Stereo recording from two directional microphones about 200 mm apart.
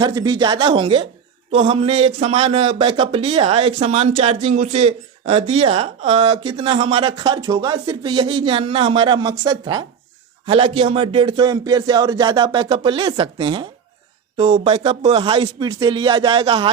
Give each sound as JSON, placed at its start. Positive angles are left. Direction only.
{"t": 0.0, "sound": "speech", "side_deg": -20}